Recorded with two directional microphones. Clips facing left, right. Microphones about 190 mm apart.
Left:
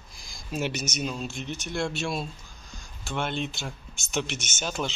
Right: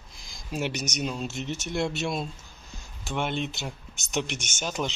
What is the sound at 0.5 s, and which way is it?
Speech, 15° right (ahead or behind).